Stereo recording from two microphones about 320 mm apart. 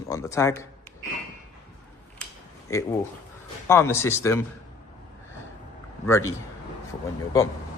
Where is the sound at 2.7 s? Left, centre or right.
Centre.